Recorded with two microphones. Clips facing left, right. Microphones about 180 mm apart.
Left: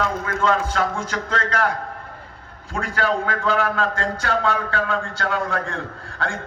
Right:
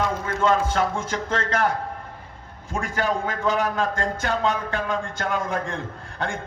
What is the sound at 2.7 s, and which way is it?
A man's voice, 15° right (ahead or behind).